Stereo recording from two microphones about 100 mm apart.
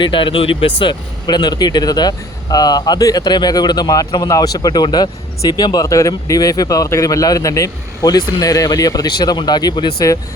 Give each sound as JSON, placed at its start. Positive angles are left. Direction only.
{"t": 0.0, "sound": "speech", "side_deg": 55}
{"t": 0.8, "sound": "speech", "side_deg": 50}